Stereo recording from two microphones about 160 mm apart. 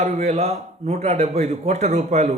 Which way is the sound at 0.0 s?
45° right (ahead or behind).